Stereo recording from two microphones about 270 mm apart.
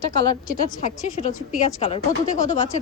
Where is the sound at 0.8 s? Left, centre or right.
Left.